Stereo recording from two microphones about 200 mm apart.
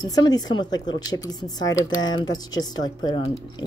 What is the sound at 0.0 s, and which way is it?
Speech, 20° left (ahead or behind).